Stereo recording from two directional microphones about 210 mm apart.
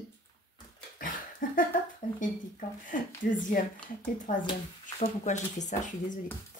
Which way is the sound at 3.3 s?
40° left (ahead or behind).